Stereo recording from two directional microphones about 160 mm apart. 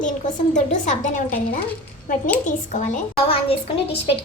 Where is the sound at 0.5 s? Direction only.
50° left (ahead or behind).